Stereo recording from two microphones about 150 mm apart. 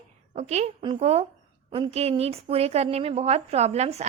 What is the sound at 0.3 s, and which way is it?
A woman's voice, 45° right (ahead or behind).